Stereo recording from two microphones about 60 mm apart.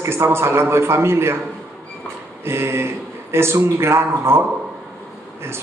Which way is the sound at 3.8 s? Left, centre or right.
Right.